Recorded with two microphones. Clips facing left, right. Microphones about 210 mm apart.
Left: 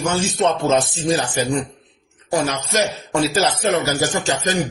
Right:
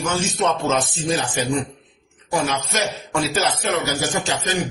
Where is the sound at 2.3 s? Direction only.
35° left (ahead or behind).